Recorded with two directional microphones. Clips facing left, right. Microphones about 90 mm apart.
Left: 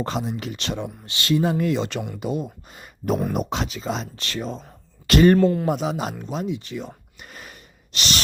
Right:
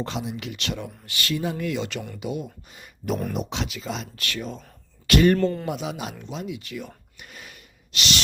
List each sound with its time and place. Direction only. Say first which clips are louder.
0.0 s speech: left 4 dB; 40° left (ahead or behind)
5.4 s speech: left 5 dB; 5° left (ahead or behind)
5.6 s speech: left 6 dB; 40° left (ahead or behind)
7.3 s breathing: left 3 dB; 40° left (ahead or behind)